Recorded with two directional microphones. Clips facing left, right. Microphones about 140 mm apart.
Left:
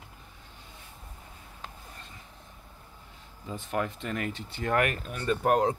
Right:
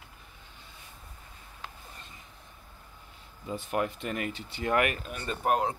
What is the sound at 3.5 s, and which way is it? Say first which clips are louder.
Speech: right 1 dB; 20° right (ahead or behind).